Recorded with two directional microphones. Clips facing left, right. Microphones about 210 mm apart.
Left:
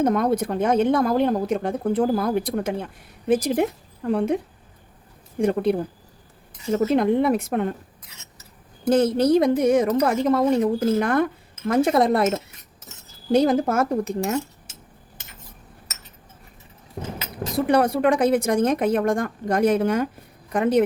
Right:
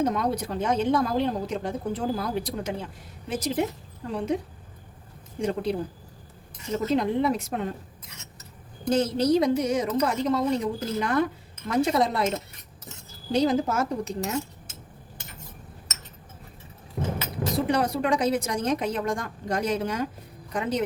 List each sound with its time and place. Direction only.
0.0 s speech: 55° left (ahead or behind)
5.4 s speech: 55° left (ahead or behind)
6.9 s speech: 55° left (ahead or behind)
8.9 s speech: 55° left (ahead or behind)
13.3 s speech: 55° left (ahead or behind)
17.7 s speech: 55° left (ahead or behind)